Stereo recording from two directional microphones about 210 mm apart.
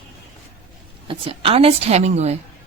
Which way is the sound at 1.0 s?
25° right (ahead or behind).